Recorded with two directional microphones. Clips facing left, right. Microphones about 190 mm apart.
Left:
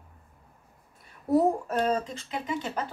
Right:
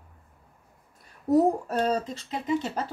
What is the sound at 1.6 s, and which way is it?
Speech, 40° right (ahead or behind).